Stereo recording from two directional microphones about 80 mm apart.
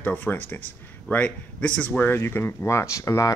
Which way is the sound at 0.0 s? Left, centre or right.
Left.